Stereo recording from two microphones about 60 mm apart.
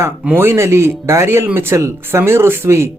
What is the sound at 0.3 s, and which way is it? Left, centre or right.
Speech, right.